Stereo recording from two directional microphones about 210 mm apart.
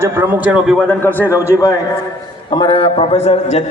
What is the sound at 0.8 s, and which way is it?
A man's voice, 10° left (ahead or behind).